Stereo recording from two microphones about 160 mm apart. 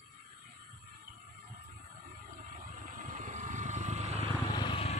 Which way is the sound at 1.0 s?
60° right (ahead or behind).